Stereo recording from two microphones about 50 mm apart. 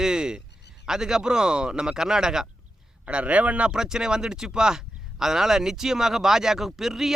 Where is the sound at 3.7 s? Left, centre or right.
Centre.